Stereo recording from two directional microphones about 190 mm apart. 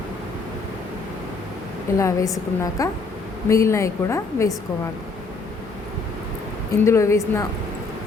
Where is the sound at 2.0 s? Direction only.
15° left (ahead or behind).